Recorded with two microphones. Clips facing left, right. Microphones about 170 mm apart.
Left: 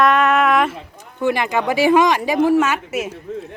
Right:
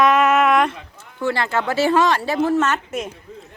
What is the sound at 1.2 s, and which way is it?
Speech, 15° left (ahead or behind).